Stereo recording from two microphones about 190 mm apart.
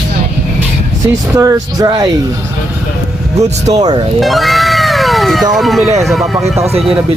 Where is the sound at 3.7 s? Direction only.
20° right (ahead or behind).